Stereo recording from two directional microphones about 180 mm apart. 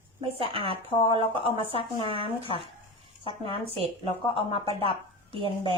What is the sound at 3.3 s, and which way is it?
Speech, 30° left (ahead or behind).